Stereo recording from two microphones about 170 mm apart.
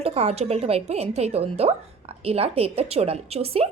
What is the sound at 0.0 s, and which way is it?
A woman's voice, 40° right (ahead or behind).